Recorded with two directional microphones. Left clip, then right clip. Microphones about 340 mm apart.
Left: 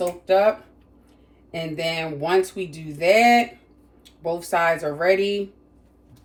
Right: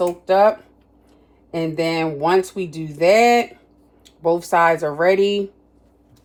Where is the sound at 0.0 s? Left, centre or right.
Right.